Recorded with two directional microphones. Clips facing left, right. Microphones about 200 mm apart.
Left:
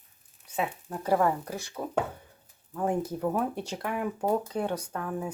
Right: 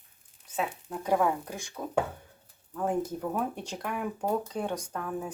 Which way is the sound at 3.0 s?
5° left (ahead or behind).